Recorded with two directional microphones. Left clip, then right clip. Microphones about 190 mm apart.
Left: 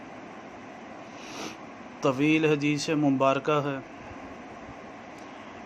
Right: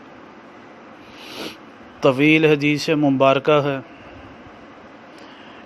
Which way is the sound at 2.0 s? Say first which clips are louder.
Right 9 dB; 30° right (ahead or behind).